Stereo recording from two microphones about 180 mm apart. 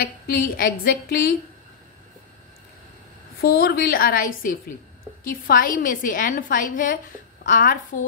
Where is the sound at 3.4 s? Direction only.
60° left (ahead or behind).